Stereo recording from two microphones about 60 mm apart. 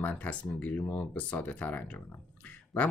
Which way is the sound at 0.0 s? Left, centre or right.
Left.